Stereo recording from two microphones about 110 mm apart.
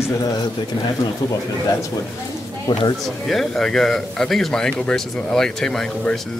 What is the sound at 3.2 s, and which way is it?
Speech, centre (ahead or behind).